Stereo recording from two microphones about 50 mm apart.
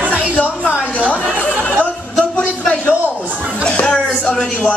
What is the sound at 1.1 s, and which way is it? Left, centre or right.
Chatter, left.